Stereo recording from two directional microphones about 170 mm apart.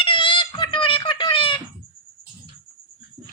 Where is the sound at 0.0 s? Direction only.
30° left (ahead or behind).